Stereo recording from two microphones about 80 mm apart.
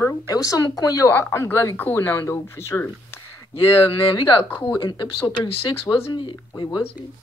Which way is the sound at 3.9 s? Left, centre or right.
Left.